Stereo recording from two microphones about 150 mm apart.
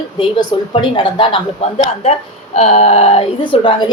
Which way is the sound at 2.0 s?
45° left (ahead or behind).